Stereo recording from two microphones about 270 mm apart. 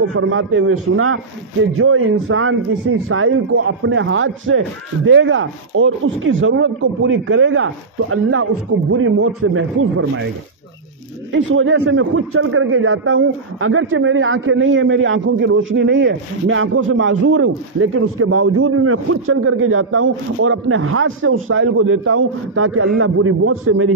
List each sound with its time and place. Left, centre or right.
0.0 s a man's voice: right
11.3 s a man's voice: right